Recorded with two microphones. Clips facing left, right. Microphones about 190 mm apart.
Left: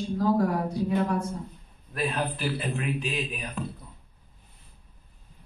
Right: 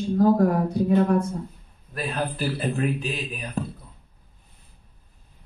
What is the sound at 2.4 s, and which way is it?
Speech, 40° right (ahead or behind).